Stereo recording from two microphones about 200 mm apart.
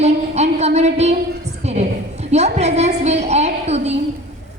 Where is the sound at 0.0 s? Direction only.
35° right (ahead or behind).